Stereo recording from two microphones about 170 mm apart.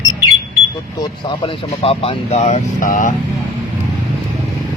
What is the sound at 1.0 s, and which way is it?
Speech, 30° left (ahead or behind).